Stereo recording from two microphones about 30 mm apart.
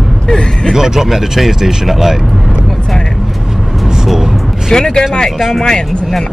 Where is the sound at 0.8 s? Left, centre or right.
Centre.